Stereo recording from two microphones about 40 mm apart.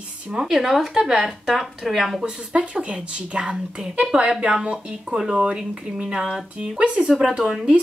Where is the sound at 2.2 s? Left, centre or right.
Right; by 7.7 s centre.